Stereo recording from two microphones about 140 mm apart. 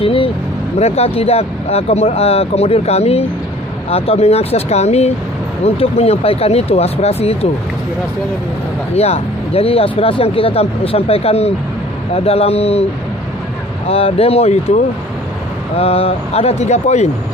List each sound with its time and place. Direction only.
0.0 s speech: 40° left (ahead or behind)
9.0 s speech: 45° left (ahead or behind)
13.8 s speech: 45° left (ahead or behind)
15.8 s speech: 45° left (ahead or behind)